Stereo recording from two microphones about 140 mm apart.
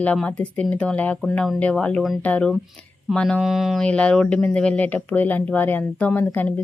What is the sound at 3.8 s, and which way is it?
Speech, 10° left (ahead or behind).